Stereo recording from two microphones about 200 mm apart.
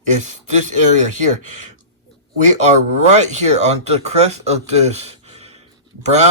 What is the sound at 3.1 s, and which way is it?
Speech, 35° right (ahead or behind).